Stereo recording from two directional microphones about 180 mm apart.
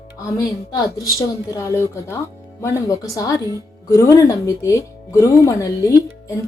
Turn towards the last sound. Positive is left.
turn(degrees=15)  # may be behind; listen again after turning